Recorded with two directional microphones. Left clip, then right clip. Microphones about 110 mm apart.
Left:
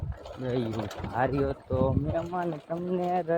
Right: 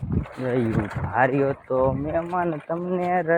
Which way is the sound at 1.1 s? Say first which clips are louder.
Right 7 dB; 75° right (ahead or behind).